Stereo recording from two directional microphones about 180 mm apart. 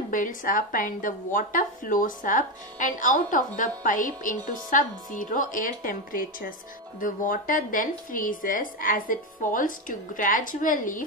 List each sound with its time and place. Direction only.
0.1 s a woman's voice: 50° left (ahead or behind)